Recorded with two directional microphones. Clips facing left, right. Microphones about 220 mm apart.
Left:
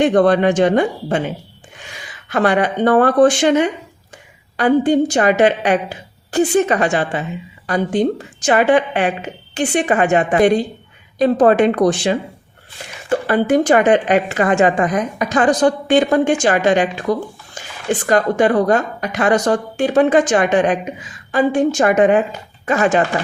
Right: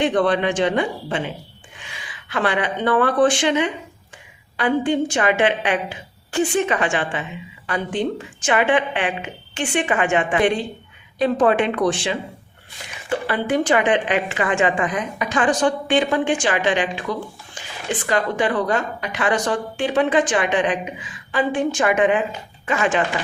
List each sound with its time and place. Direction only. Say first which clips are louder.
0.0 s a woman's voice: left 6 dB; 45° left (ahead or behind)